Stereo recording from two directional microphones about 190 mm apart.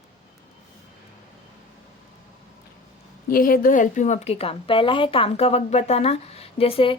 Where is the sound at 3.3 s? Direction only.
50° left (ahead or behind).